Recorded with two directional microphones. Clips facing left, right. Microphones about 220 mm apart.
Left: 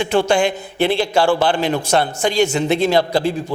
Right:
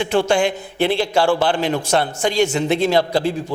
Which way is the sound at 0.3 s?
15° left (ahead or behind).